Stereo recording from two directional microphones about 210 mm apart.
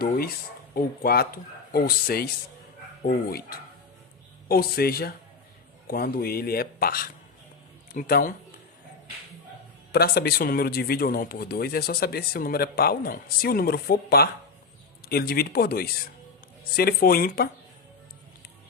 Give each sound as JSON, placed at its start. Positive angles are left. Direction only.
{"t": 0.7, "sound": "speech", "side_deg": 45}
{"t": 9.9, "sound": "speech", "side_deg": 50}